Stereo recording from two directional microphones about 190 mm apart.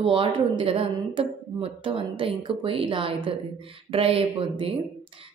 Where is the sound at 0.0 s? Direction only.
30° right (ahead or behind).